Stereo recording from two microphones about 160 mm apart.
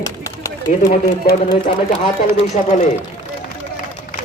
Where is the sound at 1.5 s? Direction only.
30° left (ahead or behind).